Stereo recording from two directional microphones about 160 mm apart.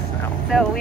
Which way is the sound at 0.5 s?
Centre (ahead or behind).